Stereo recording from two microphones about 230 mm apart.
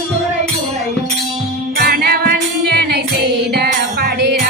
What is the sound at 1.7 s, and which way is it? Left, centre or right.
Music, right.